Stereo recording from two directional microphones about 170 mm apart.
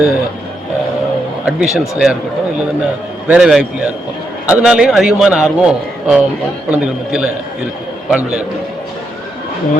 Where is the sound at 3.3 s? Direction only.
5° right (ahead or behind).